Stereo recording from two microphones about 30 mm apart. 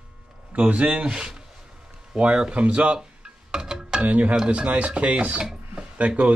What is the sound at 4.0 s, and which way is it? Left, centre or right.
Speech, right.